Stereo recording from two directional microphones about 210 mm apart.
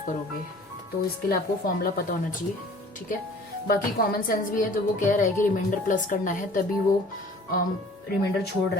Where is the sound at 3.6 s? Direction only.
45° left (ahead or behind).